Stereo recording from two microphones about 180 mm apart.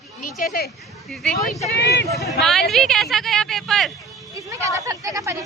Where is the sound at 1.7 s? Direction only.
75° left (ahead or behind).